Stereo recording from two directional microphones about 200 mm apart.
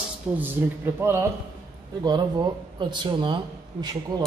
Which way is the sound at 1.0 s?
10° right (ahead or behind).